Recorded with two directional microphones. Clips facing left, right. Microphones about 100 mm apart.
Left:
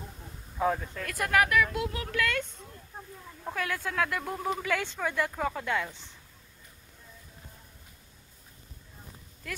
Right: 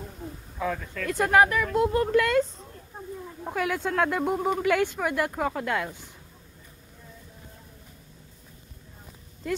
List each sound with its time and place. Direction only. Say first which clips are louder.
0.6 s speech: left 2 dB; 25° left (ahead or behind)
1.0 s speech: right 6 dB; 25° right (ahead or behind)
1.7 s speech: right 10 dB; 45° right (ahead or behind)
2.0 s speech: right 9 dB; 30° right (ahead or behind)
3.4 s speech: right 5 dB; 15° right (ahead or behind)
9.5 s speech: right 11 dB; 25° right (ahead or behind)